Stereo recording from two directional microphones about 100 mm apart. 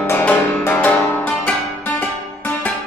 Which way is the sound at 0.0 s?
20° left (ahead or behind).